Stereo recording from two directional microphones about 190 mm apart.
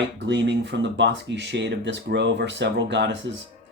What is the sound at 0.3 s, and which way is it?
Speech, 70° right (ahead or behind).